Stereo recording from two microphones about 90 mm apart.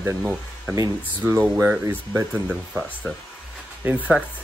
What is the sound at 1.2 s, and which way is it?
Speech, 15° right (ahead or behind).